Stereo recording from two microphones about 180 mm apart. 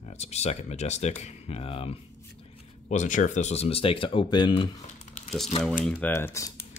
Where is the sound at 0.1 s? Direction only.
35° left (ahead or behind).